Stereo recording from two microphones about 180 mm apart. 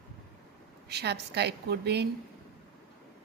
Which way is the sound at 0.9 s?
65° right (ahead or behind).